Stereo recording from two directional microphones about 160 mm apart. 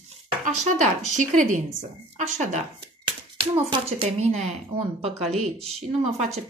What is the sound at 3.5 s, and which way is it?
Speech, 35° right (ahead or behind).